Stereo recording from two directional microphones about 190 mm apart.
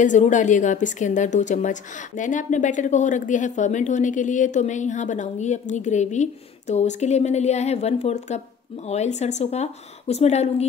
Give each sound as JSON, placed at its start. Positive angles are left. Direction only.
{"t": 0.0, "sound": "a woman's voice", "side_deg": 40}